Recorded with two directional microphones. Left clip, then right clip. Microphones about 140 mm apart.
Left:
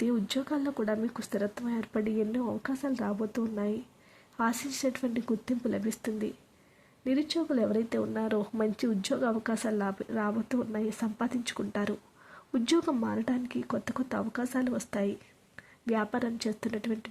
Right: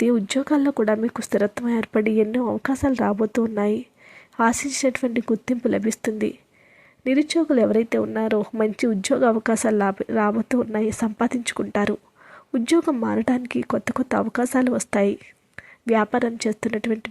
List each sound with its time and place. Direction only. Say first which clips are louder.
0.0 s speech: right 10 dB; 40° right (ahead or behind)
12.5 s speech: right 8 dB; 25° right (ahead or behind)